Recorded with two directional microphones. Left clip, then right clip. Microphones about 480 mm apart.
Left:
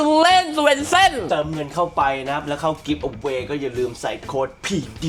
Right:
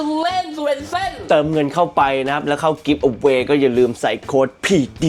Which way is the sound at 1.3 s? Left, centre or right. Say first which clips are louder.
Right 7 dB; right.